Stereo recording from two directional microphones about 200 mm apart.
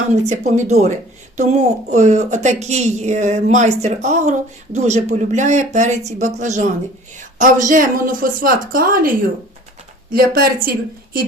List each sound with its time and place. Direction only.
0.1 s a woman's voice: 35° right (ahead or behind)
10.1 s a woman's voice: 45° right (ahead or behind)